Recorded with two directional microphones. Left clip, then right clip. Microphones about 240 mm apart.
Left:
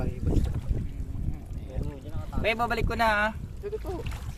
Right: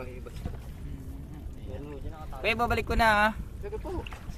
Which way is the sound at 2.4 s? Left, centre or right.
Centre.